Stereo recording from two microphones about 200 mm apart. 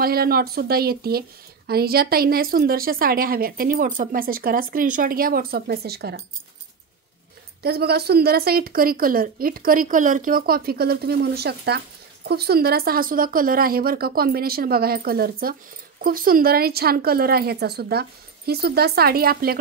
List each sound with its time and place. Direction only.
0.0 s a woman's voice: 50° right (ahead or behind)
7.6 s a woman's voice: 50° right (ahead or behind)